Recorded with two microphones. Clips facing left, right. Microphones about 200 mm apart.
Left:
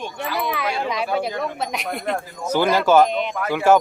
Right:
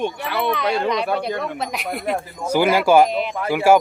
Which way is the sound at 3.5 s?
10° right (ahead or behind).